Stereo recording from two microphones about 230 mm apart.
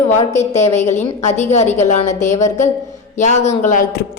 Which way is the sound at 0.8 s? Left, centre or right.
Left.